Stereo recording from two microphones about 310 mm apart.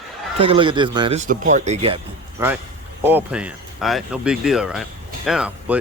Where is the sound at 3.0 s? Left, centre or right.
Centre.